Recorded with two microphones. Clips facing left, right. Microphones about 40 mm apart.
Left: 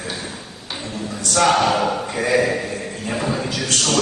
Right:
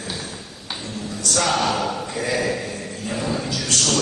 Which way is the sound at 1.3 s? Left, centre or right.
Left.